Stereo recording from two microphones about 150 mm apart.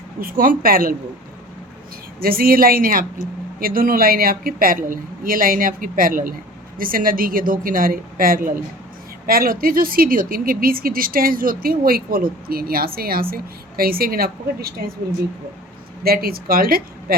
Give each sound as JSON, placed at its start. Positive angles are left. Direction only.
{"t": 0.2, "sound": "speech", "side_deg": -70}
{"t": 2.2, "sound": "speech", "side_deg": -80}
{"t": 16.0, "sound": "speech", "side_deg": -85}